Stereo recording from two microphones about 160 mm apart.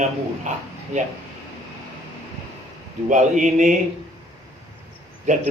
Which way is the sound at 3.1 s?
50° right (ahead or behind).